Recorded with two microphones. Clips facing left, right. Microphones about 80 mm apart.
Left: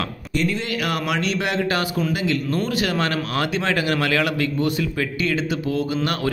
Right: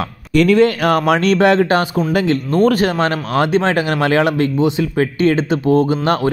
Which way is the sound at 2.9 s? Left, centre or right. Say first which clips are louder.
Right 6 dB; right.